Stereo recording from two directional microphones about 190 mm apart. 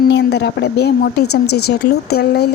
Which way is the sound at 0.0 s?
60° left (ahead or behind).